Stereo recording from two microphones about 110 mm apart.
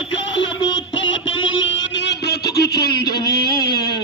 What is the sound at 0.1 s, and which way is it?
Music, 45° left (ahead or behind).